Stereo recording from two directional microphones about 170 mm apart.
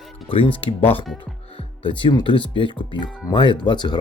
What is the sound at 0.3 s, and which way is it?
Speech, 30° left (ahead or behind).